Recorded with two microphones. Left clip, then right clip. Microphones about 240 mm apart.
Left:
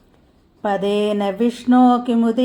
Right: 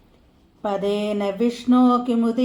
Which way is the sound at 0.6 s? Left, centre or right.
Left.